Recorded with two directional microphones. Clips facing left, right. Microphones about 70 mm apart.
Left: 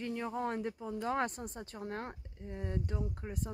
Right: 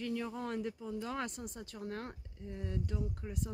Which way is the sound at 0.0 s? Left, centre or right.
Left.